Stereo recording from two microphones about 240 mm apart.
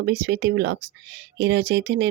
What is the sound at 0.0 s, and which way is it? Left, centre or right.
Speech, right.